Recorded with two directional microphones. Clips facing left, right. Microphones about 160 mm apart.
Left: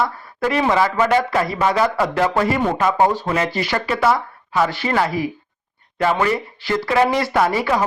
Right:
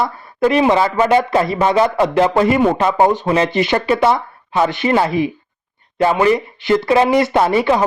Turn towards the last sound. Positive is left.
turn(degrees=-25)  # may be behind; listen again after turning